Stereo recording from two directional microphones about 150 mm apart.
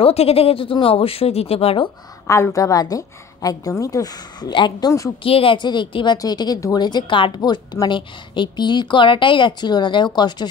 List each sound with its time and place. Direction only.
0.0 s speech: 40° left (ahead or behind)
2.2 s a woman's voice: 20° left (ahead or behind)
5.2 s a woman's voice: 40° left (ahead or behind)